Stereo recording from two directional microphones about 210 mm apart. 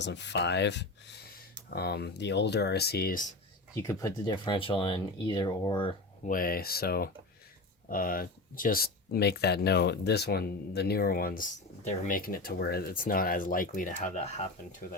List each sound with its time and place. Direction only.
0.0 s speech: 55° left (ahead or behind); by 3.3 s 40° left (ahead or behind)
3.8 s speech: 15° left (ahead or behind)
6.2 s speech: 40° left (ahead or behind)